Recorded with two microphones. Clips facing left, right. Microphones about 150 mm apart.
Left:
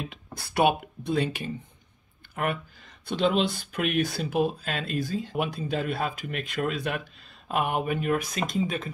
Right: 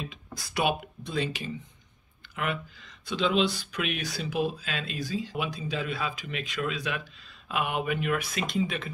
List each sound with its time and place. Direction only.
0.0 s speech: 60° left (ahead or behind); by 8.9 s 40° left (ahead or behind)